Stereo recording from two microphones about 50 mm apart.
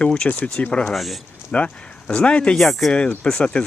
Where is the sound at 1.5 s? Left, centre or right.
Left.